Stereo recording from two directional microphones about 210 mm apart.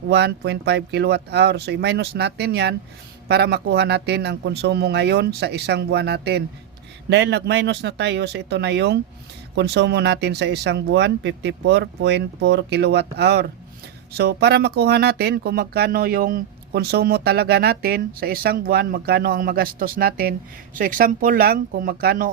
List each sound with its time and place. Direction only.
0.1 s speech: 55° right (ahead or behind)